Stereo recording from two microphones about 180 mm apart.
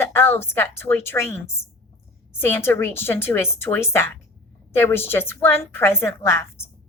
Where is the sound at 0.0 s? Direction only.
15° left (ahead or behind).